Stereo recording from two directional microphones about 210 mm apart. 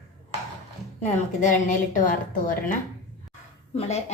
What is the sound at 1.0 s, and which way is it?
A woman's voice, 35° left (ahead or behind).